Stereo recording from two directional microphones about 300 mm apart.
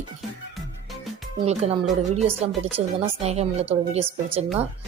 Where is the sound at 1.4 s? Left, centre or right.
Right.